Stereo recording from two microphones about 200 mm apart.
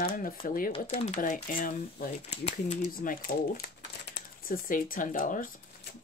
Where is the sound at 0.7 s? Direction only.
30° left (ahead or behind).